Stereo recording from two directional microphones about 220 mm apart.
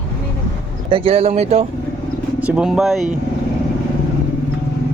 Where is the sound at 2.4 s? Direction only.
5° right (ahead or behind).